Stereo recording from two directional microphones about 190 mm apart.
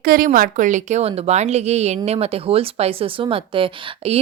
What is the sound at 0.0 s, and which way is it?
Speech, 50° right (ahead or behind).